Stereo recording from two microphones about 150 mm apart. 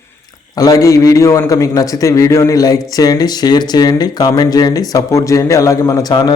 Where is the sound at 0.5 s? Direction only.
25° left (ahead or behind).